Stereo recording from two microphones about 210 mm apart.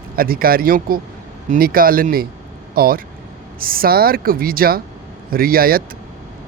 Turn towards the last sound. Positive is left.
turn(degrees=-45)  # may be behind; listen again after turning